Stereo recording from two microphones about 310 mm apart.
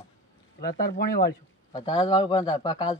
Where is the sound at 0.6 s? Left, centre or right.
Left.